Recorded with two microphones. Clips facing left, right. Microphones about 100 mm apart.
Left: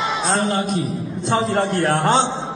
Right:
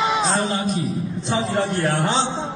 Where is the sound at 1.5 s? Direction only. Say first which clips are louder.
Left 2 dB; 50° left (ahead or behind).